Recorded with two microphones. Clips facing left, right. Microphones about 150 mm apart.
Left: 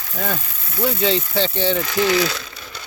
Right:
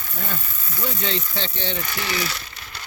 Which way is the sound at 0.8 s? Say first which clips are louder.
Left 8 dB; 65° left (ahead or behind).